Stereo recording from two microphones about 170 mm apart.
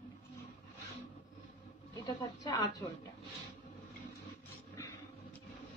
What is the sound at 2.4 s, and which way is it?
Speech, 20° left (ahead or behind).